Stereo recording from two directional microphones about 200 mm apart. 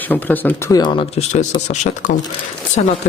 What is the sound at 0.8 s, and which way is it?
Speech, 25° left (ahead or behind).